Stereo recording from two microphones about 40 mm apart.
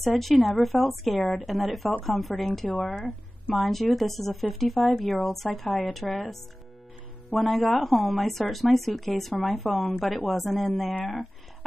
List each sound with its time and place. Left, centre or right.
0.0 s speech: centre
2.7 s speech: left
3.5 s speech: centre
7.3 s speech: centre
11.0 s speech: left